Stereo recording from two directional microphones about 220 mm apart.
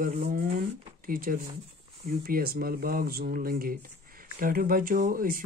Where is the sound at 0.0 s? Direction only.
40° right (ahead or behind).